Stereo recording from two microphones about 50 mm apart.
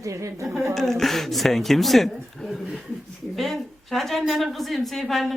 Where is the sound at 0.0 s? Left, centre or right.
Right.